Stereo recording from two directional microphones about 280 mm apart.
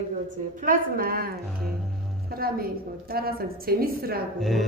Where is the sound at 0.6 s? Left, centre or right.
Right.